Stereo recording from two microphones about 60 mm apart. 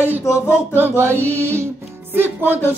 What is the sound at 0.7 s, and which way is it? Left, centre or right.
Music, right.